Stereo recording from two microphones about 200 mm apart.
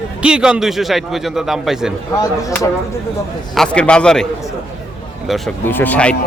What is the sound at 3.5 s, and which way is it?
Speech, 5° left (ahead or behind).